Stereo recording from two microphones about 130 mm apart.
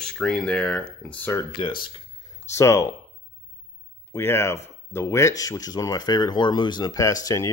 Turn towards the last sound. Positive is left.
turn(degrees=25)  # may be behind; listen again after turning